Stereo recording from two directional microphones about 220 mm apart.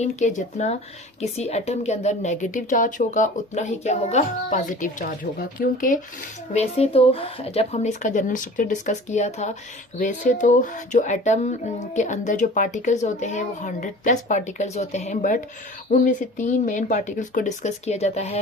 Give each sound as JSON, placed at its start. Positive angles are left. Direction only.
{"t": 0.0, "sound": "a woman's voice", "side_deg": 35}